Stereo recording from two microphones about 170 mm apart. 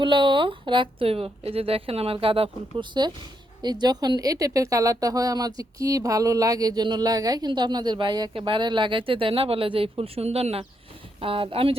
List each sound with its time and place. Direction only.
0.0 s a woman's voice: 30° right (ahead or behind)